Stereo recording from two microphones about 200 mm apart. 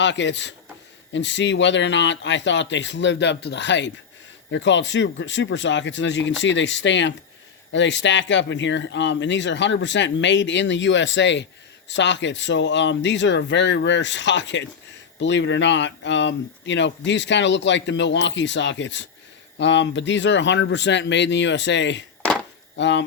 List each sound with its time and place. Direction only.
0.0 s speech: 65° left (ahead or behind)